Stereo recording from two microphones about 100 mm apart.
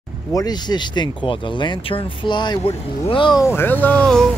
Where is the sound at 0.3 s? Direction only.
40° left (ahead or behind).